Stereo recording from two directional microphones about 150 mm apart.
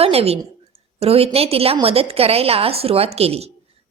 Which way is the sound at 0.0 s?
40° right (ahead or behind).